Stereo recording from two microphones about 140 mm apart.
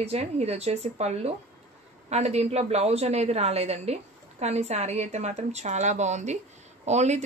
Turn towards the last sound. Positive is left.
turn(degrees=-55)  # may be behind; listen again after turning